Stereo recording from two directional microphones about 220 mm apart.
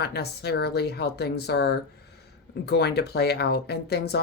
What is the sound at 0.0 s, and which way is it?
Speech, 45° left (ahead or behind).